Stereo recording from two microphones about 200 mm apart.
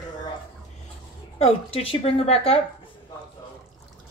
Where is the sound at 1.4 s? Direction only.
30° left (ahead or behind).